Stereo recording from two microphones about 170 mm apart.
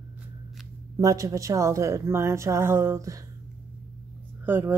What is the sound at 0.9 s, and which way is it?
Speech, 20° right (ahead or behind).